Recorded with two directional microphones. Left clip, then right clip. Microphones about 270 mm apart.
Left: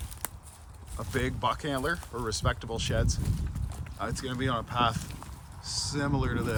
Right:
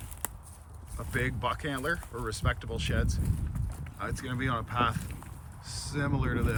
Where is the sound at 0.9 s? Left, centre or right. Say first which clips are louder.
Left 1 dB; centre.